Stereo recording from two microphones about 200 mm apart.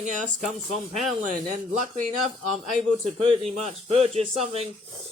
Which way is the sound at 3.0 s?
30° right (ahead or behind).